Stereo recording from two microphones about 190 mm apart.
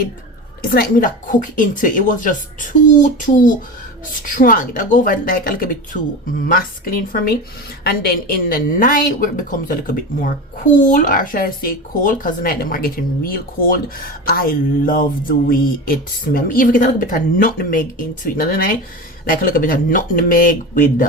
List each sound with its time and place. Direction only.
0.6 s a woman's voice: 50° left (ahead or behind)